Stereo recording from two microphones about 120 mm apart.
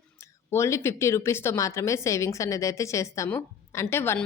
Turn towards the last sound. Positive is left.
turn(degrees=20)  # may be behind; listen again after turning